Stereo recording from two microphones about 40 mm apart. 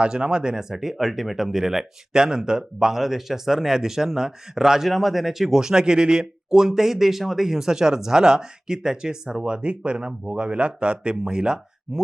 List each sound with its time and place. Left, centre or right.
0.0 s speech: right